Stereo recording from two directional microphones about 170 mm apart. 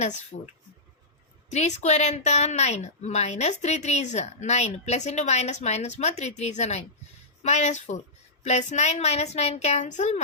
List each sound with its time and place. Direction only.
0.3 s a woman's voice: 45° left (ahead or behind)